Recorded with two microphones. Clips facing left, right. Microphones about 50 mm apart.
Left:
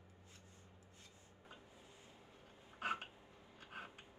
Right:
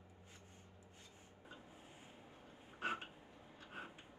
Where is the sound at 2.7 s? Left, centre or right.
Left.